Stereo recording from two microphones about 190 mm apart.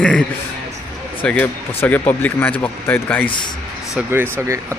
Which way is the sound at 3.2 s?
25° left (ahead or behind).